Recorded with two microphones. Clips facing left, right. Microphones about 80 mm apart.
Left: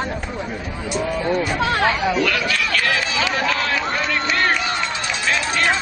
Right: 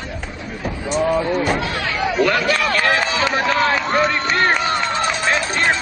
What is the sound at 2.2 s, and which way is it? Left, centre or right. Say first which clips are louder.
Run: right 4 dB; right.